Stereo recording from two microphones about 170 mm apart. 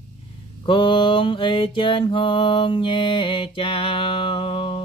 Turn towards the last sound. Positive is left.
turn(degrees=35)  # may be behind; listen again after turning